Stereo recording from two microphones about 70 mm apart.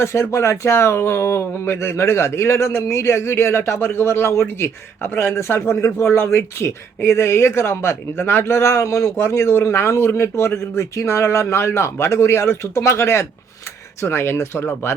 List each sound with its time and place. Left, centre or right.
0.0 s speech: left